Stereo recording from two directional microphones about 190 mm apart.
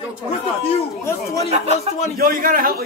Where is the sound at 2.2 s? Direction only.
45° right (ahead or behind).